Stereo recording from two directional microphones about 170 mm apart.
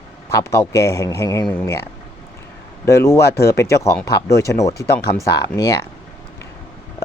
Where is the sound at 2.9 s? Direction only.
15° left (ahead or behind).